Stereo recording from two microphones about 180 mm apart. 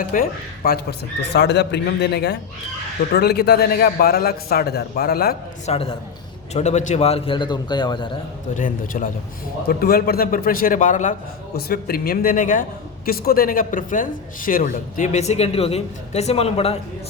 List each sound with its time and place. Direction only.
0.0 s a man's voice: 50° left (ahead or behind)
5.6 s a man's voice: 35° left (ahead or behind)
8.5 s a woman's voice: 50° left (ahead or behind)
9.6 s a woman's voice: 60° left (ahead or behind)
11.5 s a man's voice: 55° left (ahead or behind); by 16.7 s 35° left (ahead or behind)